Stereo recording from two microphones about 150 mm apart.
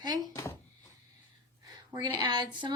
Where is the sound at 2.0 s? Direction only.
25° right (ahead or behind).